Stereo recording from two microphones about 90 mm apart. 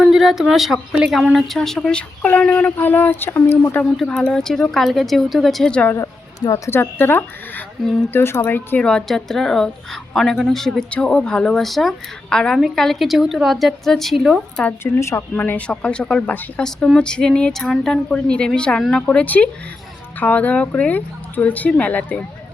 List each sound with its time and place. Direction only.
0.0 s a woman's voice: 5° right (ahead or behind); by 3.8 s 20° left (ahead or behind)
3.9 s a woman's voice: 5° left (ahead or behind)
5.7 s speech: 20° left (ahead or behind)
6.0 s a sound: 40° left (ahead or behind)
6.7 s speech: 25° left (ahead or behind)
8.8 s a woman's voice: 10° left (ahead or behind)
14.5 s speech: 15° left (ahead or behind)
14.9 s speech: 30° left (ahead or behind); by 22.2 s 15° left (ahead or behind)